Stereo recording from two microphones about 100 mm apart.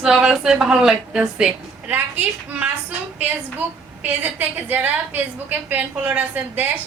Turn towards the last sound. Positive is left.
turn(degrees=-20)  # may be behind; listen again after turning